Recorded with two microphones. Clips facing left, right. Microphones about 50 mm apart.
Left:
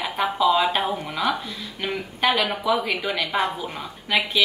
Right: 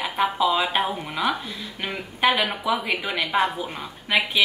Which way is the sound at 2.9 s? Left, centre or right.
Centre.